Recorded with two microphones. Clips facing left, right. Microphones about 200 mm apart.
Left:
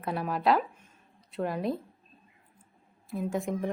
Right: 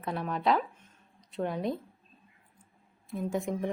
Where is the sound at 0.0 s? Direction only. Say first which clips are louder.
Left 2 dB; 5° left (ahead or behind).